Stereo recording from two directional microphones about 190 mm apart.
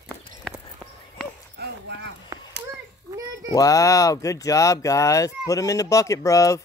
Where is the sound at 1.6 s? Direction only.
70° right (ahead or behind).